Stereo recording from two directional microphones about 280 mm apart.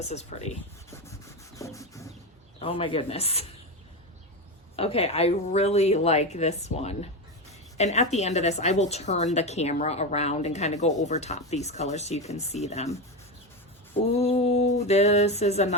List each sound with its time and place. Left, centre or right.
0.0 s a woman's voice: left
0.9 s rub: centre
2.6 s a woman's voice: centre
4.8 s a woman's voice: left
14.2 s a woman's voice: left